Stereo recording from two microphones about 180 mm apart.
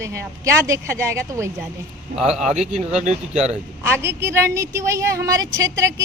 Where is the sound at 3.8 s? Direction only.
15° right (ahead or behind).